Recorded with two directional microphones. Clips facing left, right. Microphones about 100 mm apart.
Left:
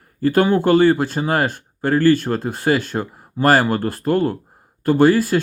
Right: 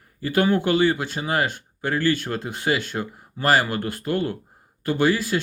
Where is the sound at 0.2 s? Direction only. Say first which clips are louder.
Left 5 dB; 45° left (ahead or behind).